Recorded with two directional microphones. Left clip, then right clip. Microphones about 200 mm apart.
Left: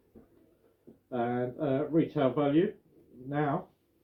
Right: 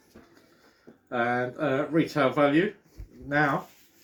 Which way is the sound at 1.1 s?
15° right (ahead or behind).